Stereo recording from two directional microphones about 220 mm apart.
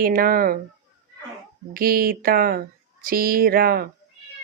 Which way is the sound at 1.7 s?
45° right (ahead or behind).